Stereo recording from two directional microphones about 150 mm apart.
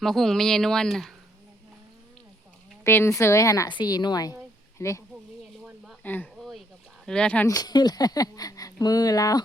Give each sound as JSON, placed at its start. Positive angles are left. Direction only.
{"t": 0.0, "sound": "speech", "side_deg": 0}
{"t": 2.8, "sound": "speech", "side_deg": 15}
{"t": 5.6, "sound": "a sound", "side_deg": -5}
{"t": 6.0, "sound": "speech", "side_deg": 10}
{"t": 7.4, "sound": "speech", "side_deg": 25}